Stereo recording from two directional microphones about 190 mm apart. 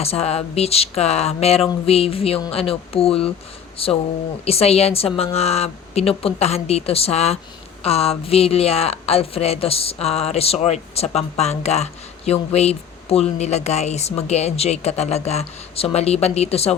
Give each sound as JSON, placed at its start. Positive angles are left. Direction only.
{"t": 0.0, "sound": "a woman's voice", "side_deg": 30}